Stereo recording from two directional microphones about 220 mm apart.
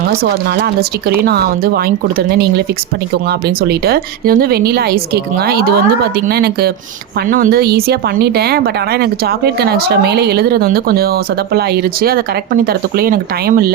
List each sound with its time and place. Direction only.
0.2 s speech: 45° right (ahead or behind)